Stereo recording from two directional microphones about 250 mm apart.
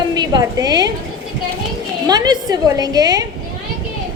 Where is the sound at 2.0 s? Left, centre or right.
Centre.